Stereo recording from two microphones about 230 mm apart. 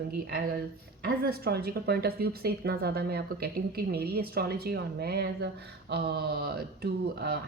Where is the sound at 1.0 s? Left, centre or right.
Right.